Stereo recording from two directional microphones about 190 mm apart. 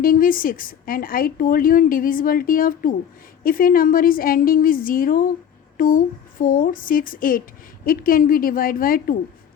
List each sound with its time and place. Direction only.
0.0 s a woman's voice: 50° left (ahead or behind)